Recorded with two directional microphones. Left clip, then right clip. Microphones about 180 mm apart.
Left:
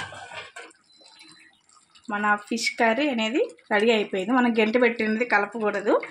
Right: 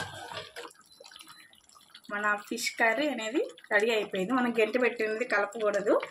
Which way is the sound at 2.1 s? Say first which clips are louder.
Left 6 dB; 50° left (ahead or behind).